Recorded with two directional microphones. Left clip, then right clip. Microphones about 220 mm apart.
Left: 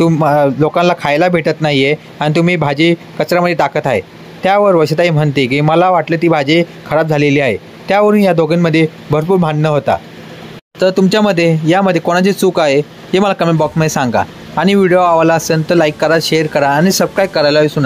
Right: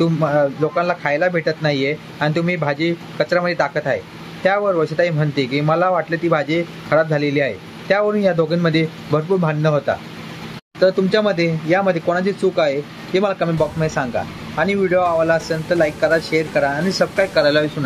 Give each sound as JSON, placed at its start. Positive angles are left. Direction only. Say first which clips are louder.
{"t": 0.0, "sound": "a man's voice", "louder": "left 6 dB", "side_deg": 35}